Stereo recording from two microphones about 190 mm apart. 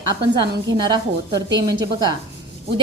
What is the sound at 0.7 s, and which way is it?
A woman's voice, 20° right (ahead or behind).